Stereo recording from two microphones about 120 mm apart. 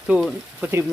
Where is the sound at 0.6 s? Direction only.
20° right (ahead or behind).